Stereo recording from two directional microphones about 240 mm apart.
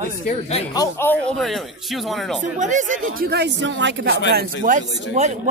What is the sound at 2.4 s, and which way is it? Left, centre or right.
Speech, right.